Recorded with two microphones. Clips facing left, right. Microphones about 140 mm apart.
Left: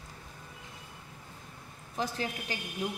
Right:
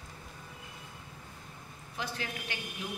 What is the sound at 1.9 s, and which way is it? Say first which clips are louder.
Speech: left 5 dB; 35° left (ahead or behind).